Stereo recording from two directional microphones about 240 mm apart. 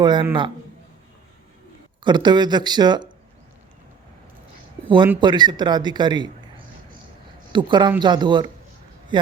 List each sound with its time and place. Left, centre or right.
0.0 s speech: centre
2.0 s speech: centre
5.2 s speech: centre
7.5 s speech: centre